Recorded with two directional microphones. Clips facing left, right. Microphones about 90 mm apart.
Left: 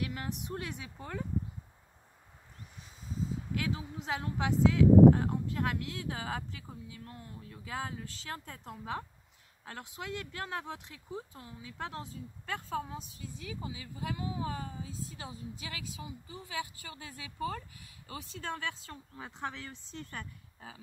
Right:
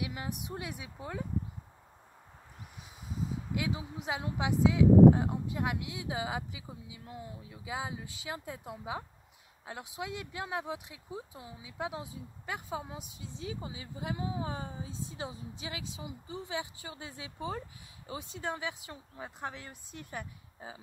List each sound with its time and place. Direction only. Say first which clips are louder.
0.0 s speech: even; 15° right (ahead or behind)
2.8 s speech: even; 15° right (ahead or behind)
13.3 s speech: right 2 dB; 25° right (ahead or behind)